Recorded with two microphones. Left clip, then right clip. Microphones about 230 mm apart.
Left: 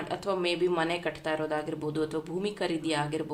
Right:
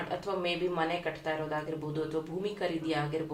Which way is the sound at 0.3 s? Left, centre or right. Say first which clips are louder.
Left 5 dB; left.